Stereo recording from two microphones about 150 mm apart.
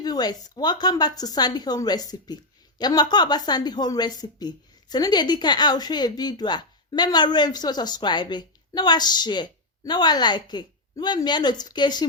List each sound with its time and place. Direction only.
0.0 s speech: 25° left (ahead or behind)